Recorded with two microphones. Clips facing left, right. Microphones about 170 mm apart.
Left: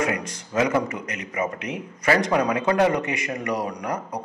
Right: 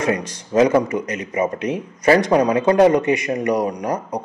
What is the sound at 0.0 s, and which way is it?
A man's voice, 30° right (ahead or behind).